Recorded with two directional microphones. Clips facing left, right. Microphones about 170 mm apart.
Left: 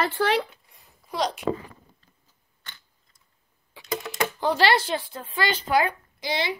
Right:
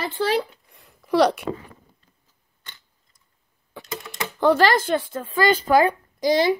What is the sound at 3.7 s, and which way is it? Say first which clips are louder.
Typewriter: right 10 dB; 50° right (ahead or behind).